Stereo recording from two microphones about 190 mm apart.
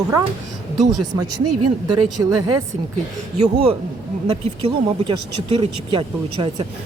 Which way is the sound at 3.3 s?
35° right (ahead or behind).